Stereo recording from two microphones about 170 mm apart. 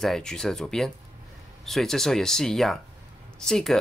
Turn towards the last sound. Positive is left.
turn(degrees=5)  # may be behind; listen again after turning